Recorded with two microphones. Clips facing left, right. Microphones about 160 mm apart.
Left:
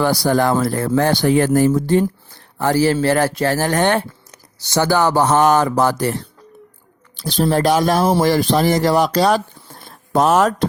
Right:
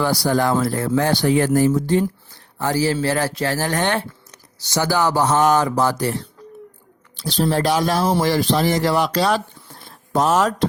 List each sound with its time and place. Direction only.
0.0 s a man's voice: 50° left (ahead or behind)